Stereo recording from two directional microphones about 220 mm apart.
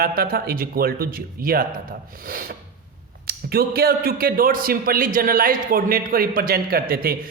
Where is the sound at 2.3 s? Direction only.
40° right (ahead or behind).